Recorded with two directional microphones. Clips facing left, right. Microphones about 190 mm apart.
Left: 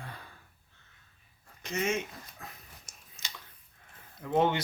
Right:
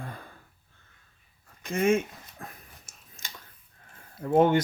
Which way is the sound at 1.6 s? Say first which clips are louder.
Right 8 dB; 50° right (ahead or behind).